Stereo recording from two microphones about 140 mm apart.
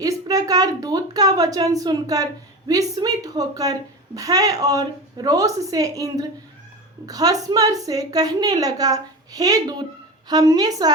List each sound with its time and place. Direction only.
0.0 s a woman's voice: 25° right (ahead or behind)